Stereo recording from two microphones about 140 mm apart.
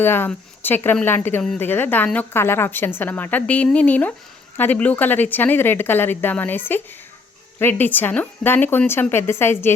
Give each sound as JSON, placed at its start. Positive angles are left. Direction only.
{"t": 0.0, "sound": "speech", "side_deg": 15}